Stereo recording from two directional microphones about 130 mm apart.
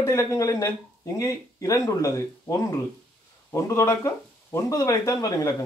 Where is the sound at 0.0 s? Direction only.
20° left (ahead or behind).